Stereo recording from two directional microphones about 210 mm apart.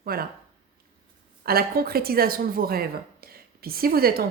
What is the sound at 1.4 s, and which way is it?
Speech, 45° right (ahead or behind).